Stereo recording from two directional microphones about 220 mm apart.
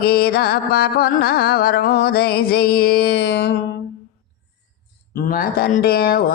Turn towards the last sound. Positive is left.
turn(degrees=45)  # may be behind; listen again after turning